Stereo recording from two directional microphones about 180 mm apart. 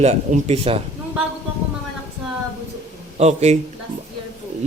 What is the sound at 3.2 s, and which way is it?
Speech, 35° right (ahead or behind).